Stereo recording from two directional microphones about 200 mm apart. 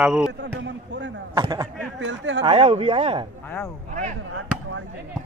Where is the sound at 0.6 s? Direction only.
65° right (ahead or behind).